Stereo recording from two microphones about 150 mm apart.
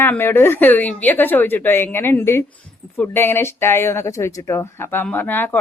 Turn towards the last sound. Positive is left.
turn(degrees=10)  # may be behind; listen again after turning